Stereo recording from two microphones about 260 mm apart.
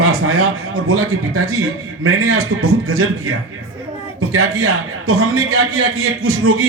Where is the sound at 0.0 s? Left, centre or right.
Right.